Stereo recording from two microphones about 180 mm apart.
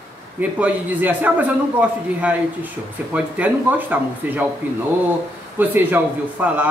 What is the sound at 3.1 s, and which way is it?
Speech, 10° right (ahead or behind).